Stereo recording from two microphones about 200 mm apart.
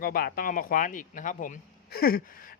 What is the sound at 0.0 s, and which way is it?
Speech, 45° left (ahead or behind).